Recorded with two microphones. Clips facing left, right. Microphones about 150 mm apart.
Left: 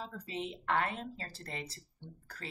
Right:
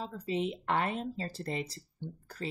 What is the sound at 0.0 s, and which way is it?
Speech, 20° right (ahead or behind).